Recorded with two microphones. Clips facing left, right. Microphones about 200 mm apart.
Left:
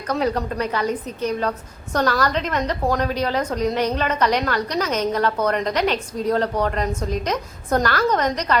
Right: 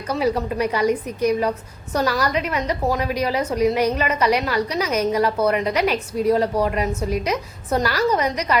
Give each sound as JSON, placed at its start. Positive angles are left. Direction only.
{"t": 0.1, "sound": "a woman's voice", "side_deg": -5}